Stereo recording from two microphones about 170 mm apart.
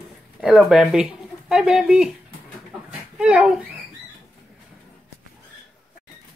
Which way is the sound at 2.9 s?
5° right (ahead or behind).